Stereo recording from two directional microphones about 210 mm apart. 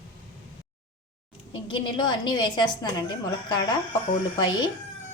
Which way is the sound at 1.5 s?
25° left (ahead or behind).